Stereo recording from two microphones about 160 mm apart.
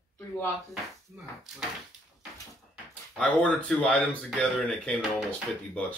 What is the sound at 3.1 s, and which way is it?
Speech, 5° left (ahead or behind).